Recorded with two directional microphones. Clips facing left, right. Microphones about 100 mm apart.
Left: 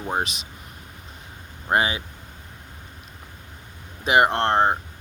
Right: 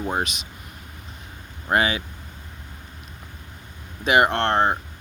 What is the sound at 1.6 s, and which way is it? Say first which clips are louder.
Speech: right 1 dB; 25° left (ahead or behind).